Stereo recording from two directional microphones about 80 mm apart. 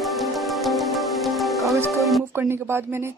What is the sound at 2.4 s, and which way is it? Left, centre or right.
Speech, right.